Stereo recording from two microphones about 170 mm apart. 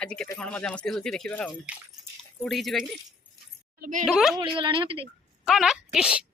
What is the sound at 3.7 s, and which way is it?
Speech, 55° right (ahead or behind).